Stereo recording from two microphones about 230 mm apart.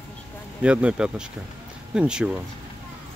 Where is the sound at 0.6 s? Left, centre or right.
Centre.